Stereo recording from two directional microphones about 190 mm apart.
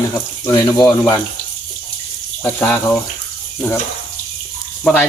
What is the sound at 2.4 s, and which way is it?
Speech, 10° left (ahead or behind).